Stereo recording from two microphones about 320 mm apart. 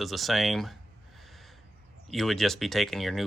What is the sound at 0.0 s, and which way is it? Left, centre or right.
Speech, centre.